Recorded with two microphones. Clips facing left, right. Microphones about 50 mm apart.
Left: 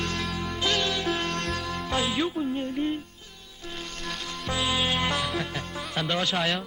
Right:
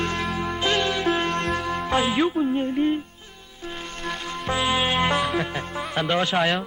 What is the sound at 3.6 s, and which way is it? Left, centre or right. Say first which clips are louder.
Music: right 4 dB; right.